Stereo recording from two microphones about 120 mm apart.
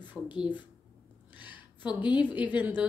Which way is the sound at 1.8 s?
40° left (ahead or behind).